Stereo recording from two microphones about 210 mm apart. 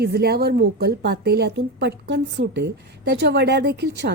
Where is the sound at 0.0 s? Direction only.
50° right (ahead or behind).